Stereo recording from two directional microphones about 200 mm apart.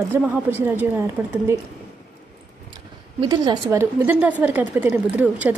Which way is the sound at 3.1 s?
20° right (ahead or behind).